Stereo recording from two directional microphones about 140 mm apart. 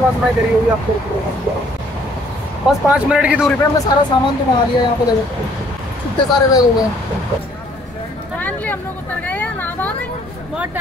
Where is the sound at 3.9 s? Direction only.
30° left (ahead or behind).